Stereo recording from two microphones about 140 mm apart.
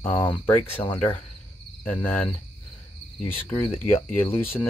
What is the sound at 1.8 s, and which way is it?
Speech, 15° left (ahead or behind).